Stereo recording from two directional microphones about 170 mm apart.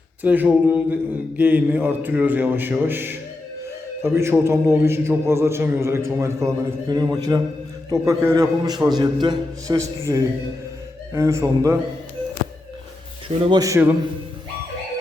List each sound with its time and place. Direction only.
0.2 s a man's voice: 10° right (ahead or behind)
11.1 s a man's voice: 15° right (ahead or behind)
13.2 s a man's voice: 30° right (ahead or behind)